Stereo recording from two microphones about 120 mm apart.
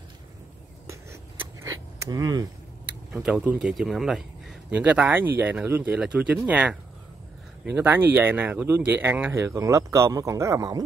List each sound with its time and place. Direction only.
1.4 s a sound: 25° right (ahead or behind)
3.1 s speech: 5° right (ahead or behind)
4.6 s speech: 10° right (ahead or behind); by 10.8 s 25° right (ahead or behind)